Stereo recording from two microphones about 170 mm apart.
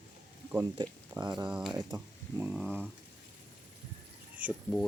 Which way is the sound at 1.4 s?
5° right (ahead or behind).